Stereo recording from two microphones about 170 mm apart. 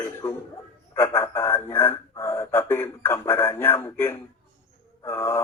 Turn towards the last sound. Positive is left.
turn(degrees=15)  # may be behind; listen again after turning